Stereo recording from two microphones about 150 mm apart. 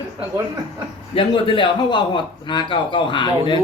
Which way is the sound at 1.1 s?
35° left (ahead or behind).